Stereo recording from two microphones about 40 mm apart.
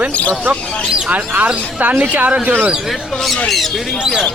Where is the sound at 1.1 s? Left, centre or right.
Right.